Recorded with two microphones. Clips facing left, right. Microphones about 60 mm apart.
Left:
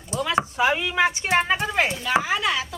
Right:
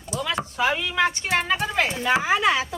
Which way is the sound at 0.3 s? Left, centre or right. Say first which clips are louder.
Left 3 dB; centre.